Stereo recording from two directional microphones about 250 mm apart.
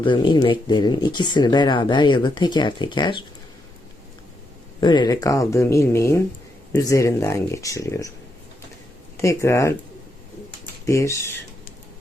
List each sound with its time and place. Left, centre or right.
0.0 s speech: centre
4.8 s speech: centre
9.1 s speech: centre
10.8 s speech: centre